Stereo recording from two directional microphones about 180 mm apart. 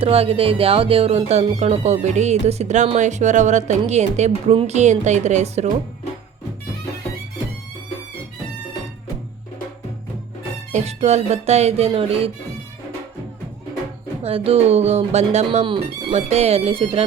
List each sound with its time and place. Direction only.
0.0 s speech: 30° right (ahead or behind)
10.7 s speech: 40° right (ahead or behind)
14.2 s speech: 30° right (ahead or behind)